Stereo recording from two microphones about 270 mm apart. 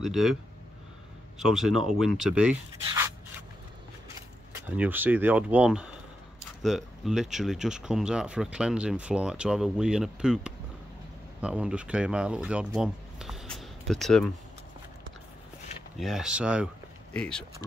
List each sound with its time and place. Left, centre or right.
0.0 s speech: centre
1.4 s speech: centre
4.7 s speech: centre
16.0 s speech: centre